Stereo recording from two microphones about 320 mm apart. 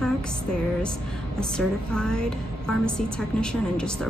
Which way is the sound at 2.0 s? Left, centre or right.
Centre.